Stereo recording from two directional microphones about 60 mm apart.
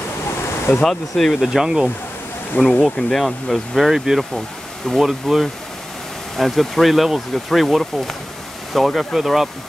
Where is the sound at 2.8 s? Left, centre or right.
Centre.